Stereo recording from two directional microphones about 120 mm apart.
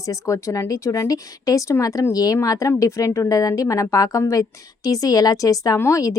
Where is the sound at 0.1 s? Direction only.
25° left (ahead or behind).